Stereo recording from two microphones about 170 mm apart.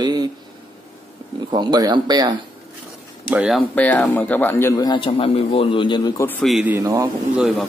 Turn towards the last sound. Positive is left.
turn(degrees=0)  # may be behind; listen again after turning